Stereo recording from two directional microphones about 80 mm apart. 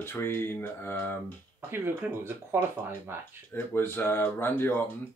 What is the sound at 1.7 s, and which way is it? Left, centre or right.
Speech, right.